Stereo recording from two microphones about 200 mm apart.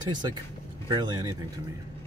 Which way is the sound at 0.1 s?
20° right (ahead or behind).